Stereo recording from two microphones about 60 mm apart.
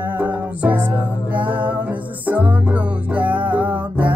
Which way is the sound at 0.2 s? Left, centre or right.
Right.